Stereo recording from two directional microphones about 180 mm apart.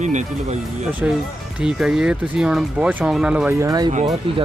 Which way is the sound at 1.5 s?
5° right (ahead or behind).